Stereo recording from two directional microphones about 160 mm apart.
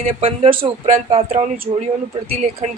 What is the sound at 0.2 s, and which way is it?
A woman's voice, 35° right (ahead or behind).